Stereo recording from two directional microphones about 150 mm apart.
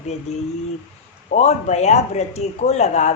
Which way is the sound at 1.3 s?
50° left (ahead or behind).